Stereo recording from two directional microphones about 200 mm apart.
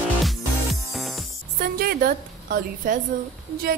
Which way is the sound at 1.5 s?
50° right (ahead or behind).